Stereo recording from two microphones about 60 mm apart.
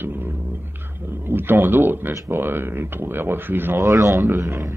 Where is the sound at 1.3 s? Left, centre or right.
Right.